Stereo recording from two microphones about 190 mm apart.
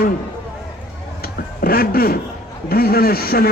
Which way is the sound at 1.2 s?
50° left (ahead or behind).